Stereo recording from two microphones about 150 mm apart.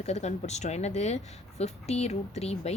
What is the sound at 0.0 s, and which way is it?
Speech, 45° left (ahead or behind).